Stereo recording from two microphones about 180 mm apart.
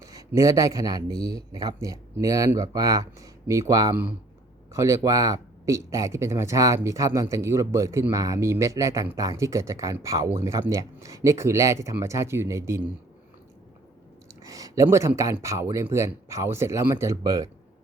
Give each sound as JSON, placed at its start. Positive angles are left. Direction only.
{"t": 0.0, "sound": "speech", "side_deg": -20}
{"t": 14.4, "sound": "speech", "side_deg": -20}